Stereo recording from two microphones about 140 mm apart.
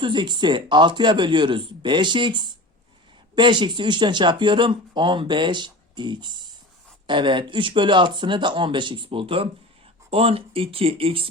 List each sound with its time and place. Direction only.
0.0 s speech: 35° right (ahead or behind)